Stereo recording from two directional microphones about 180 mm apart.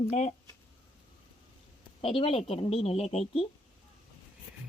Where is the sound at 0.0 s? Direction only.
40° left (ahead or behind).